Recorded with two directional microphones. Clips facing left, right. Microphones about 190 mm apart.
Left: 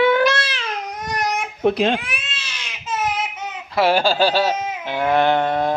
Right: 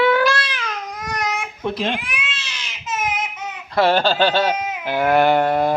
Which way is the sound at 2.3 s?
55° left (ahead or behind).